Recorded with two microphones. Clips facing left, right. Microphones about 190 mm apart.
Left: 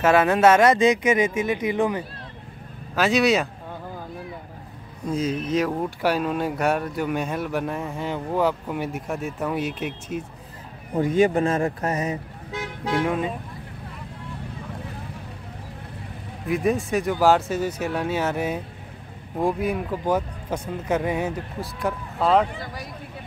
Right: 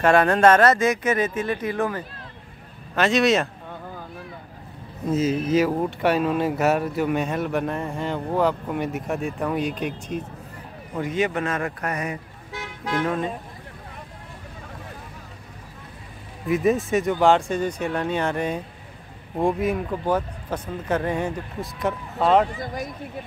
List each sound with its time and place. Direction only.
0.0 s speech: 5° left (ahead or behind)
3.0 s speech: centre (ahead or behind)
5.0 s speech: 5° right (ahead or behind)
11.0 s speech: 35° left (ahead or behind); by 13.3 s 10° left (ahead or behind)
16.4 s speech: centre (ahead or behind)